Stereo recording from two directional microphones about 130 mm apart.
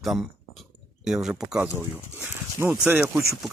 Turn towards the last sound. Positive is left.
turn(degrees=-15)  # may be behind; listen again after turning